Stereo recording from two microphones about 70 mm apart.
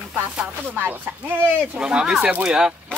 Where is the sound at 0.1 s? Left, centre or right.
Centre.